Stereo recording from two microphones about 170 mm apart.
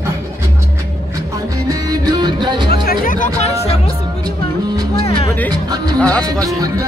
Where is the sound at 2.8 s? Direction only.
60° left (ahead or behind).